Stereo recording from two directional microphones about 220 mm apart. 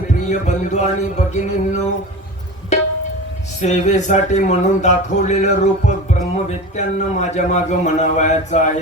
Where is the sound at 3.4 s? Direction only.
30° left (ahead or behind).